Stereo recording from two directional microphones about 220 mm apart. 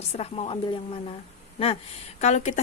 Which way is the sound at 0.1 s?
25° left (ahead or behind).